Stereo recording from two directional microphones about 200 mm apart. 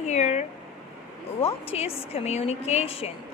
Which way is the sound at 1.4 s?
30° left (ahead or behind).